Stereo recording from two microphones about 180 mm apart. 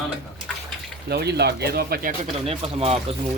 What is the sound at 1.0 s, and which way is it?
Speech, 65° right (ahead or behind).